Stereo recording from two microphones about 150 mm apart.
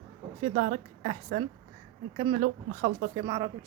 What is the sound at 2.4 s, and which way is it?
Speech, 65° right (ahead or behind).